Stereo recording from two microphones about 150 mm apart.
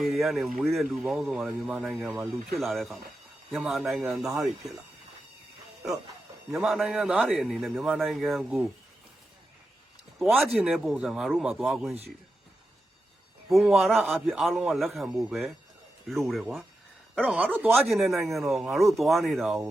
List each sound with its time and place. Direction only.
0.0 s speech: centre (ahead or behind)
6.5 s speech: centre (ahead or behind)
10.2 s speech: centre (ahead or behind)
13.5 s speech: centre (ahead or behind)
17.7 s speech: centre (ahead or behind)